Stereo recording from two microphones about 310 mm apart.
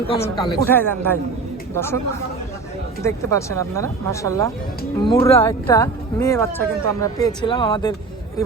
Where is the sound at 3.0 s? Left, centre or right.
Centre.